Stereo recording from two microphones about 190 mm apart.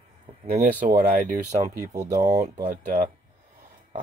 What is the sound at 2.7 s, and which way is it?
Speech, 40° right (ahead or behind).